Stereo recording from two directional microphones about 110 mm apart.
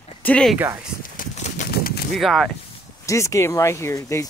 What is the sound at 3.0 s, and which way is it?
Speech, 30° left (ahead or behind).